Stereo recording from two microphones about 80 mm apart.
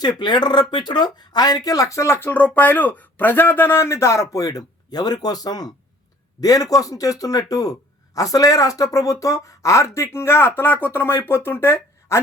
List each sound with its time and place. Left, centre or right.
0.2 s speech: left
2.3 s speech: left